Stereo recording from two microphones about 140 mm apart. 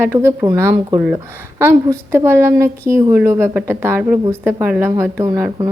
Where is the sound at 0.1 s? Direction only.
20° right (ahead or behind).